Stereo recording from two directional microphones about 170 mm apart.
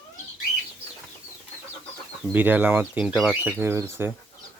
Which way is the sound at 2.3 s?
10° right (ahead or behind).